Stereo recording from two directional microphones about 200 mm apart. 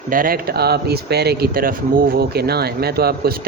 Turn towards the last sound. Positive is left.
turn(degrees=-50)  # may be behind; listen again after turning